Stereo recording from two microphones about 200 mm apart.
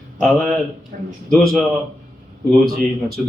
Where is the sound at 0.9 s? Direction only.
45° right (ahead or behind).